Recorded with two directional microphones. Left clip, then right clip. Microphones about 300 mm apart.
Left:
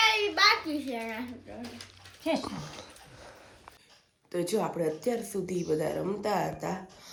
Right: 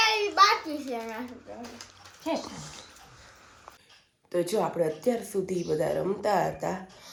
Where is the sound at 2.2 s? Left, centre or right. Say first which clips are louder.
Left 1 dB; left.